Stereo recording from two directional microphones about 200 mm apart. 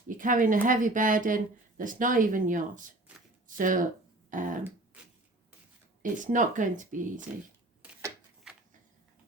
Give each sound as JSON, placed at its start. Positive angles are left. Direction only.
{"t": 0.1, "sound": "speech", "side_deg": -40}
{"t": 4.3, "sound": "a sound", "side_deg": -40}
{"t": 6.0, "sound": "speech", "side_deg": -40}
{"t": 7.8, "sound": "shuffling cards", "side_deg": -10}